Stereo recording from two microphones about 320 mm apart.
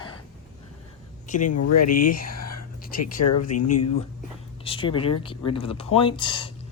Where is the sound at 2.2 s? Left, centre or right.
Left.